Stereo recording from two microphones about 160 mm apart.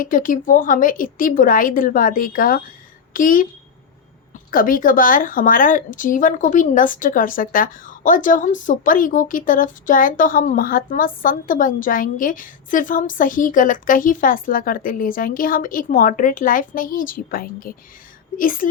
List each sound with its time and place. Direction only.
0.0 s a woman's voice: 60° left (ahead or behind)
4.5 s a woman's voice: 60° left (ahead or behind)